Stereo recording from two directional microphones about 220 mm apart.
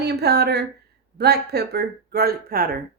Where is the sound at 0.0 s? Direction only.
50° right (ahead or behind).